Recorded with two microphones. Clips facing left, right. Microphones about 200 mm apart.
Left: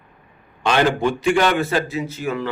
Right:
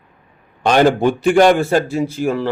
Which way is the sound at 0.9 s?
50° right (ahead or behind).